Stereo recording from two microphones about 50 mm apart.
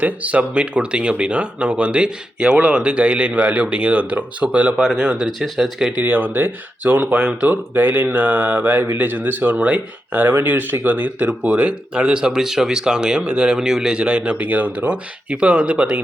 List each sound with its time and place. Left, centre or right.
0.0 s speech: right
5.4 s speech: centre
6.0 s speech: right
11.9 s speech: centre
14.3 s speech: right